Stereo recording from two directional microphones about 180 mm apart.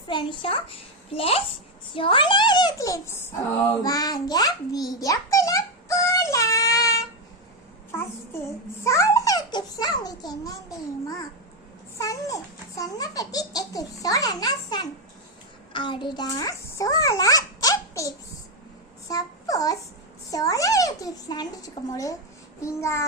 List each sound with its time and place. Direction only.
0.1 s a child's voice: 25° left (ahead or behind)
3.8 s a sound: 20° left (ahead or behind)
8.8 s a child's voice: 15° left (ahead or behind)
11.9 s a child's voice: 20° left (ahead or behind)
22.6 s babbling: 15° left (ahead or behind)